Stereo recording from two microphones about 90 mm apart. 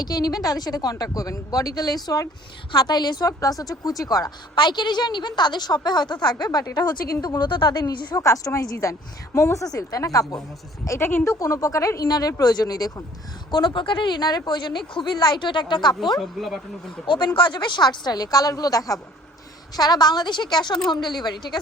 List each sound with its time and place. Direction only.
0.0 s a woman's voice: 45° left (ahead or behind)
10.8 s speech: 30° left (ahead or behind)
12.0 s a woman's voice: 50° left (ahead or behind)
13.5 s speech: 60° left (ahead or behind)
16.2 s speech: centre (ahead or behind)
17.1 s a woman's voice: 60° left (ahead or behind)